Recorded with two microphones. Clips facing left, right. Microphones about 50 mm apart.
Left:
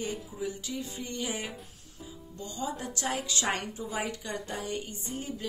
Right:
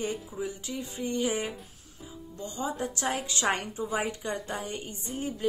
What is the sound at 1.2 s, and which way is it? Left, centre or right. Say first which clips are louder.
Speech: right 5 dB; centre.